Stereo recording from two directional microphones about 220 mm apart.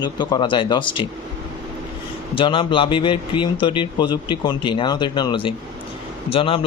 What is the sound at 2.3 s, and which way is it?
A man's voice, 20° left (ahead or behind).